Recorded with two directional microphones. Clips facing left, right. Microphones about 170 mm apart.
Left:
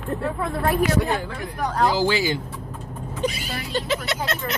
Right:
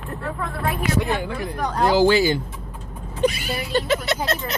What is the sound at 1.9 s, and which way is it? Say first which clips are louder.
Speech: right 5 dB; 55° right (ahead or behind).